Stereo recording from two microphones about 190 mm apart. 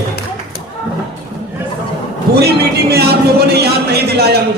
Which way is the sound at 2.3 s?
55° right (ahead or behind).